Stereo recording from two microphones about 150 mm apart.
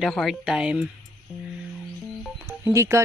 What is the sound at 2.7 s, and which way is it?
Speech, 20° right (ahead or behind).